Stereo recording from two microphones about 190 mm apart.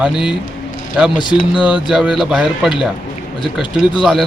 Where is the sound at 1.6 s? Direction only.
5° right (ahead or behind).